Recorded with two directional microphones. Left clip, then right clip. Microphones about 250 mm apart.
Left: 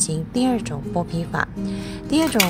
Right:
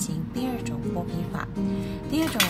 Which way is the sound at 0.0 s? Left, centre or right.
Left.